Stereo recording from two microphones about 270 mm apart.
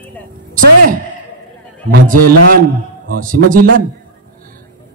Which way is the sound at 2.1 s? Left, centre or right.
Right.